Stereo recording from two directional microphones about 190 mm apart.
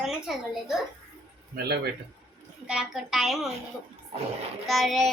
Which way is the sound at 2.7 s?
5° right (ahead or behind).